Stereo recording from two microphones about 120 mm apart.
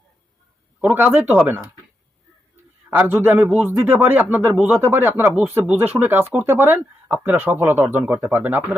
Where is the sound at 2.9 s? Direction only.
15° right (ahead or behind).